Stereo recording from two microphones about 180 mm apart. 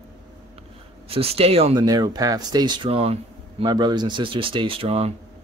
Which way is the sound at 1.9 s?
20° right (ahead or behind).